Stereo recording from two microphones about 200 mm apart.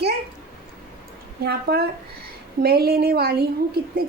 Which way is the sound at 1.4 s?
50° right (ahead or behind).